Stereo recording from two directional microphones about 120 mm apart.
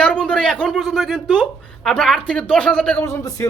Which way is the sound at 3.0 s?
25° left (ahead or behind).